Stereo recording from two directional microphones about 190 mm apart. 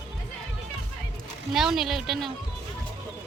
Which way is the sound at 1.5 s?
Centre (ahead or behind).